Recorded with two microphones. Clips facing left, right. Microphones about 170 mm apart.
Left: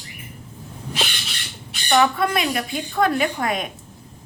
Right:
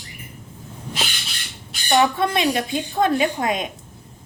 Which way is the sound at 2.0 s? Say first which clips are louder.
Right 2 dB; 25° right (ahead or behind).